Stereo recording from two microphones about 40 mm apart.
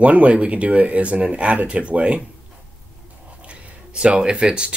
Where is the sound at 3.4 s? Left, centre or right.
Right.